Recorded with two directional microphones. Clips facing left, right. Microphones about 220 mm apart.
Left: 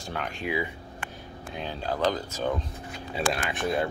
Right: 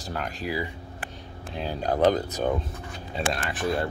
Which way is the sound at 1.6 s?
45° right (ahead or behind).